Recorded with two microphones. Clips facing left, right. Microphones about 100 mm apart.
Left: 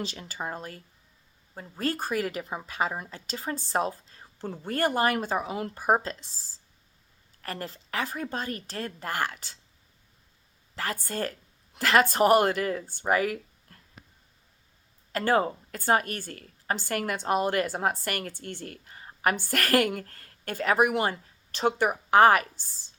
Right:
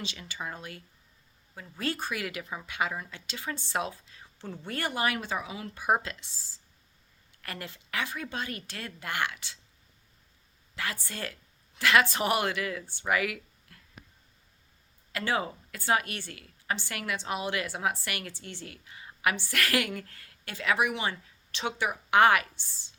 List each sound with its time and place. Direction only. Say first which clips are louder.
0.0 s a woman's voice: left 4 dB; 40° left (ahead or behind)
1.8 s a woman's voice: left 4 dB; 40° left (ahead or behind)
10.8 s a woman's voice: left 5 dB; 40° left (ahead or behind)
15.1 s a woman's voice: left 6 dB; 45° left (ahead or behind)